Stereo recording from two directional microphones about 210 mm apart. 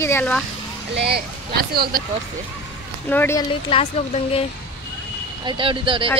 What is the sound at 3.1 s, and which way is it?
Speech, 10° left (ahead or behind).